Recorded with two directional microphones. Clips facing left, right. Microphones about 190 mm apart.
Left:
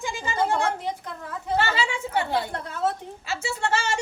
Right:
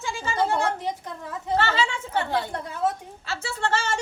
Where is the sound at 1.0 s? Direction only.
20° right (ahead or behind).